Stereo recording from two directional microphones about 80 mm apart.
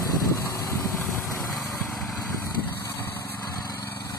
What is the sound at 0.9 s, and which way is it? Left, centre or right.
Vehicle, centre.